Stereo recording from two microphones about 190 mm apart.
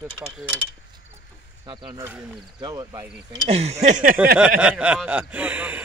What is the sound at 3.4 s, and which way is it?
Speech, 35° right (ahead or behind).